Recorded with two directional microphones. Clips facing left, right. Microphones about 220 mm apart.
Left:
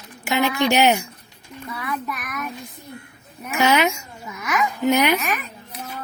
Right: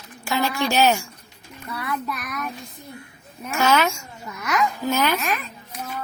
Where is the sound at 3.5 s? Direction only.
15° left (ahead or behind).